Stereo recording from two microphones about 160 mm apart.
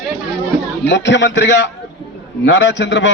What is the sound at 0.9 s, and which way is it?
A man's voice, 90° left.